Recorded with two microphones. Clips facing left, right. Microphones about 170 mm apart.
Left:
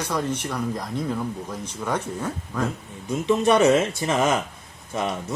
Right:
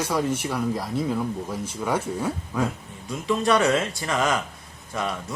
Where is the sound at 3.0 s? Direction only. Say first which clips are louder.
Left 3 dB; 20° left (ahead or behind).